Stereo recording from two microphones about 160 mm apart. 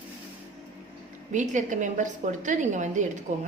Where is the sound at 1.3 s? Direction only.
50° right (ahead or behind).